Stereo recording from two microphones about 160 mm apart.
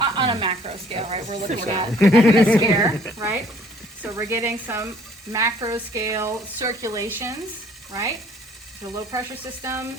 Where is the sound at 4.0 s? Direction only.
15° right (ahead or behind).